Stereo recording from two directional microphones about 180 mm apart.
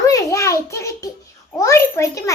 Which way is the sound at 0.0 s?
20° left (ahead or behind).